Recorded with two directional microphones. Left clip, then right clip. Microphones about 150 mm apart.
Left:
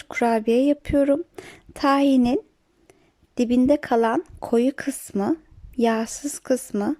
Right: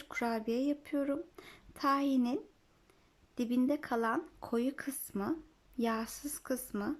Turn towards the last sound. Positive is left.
turn(degrees=50)  # may be behind; listen again after turning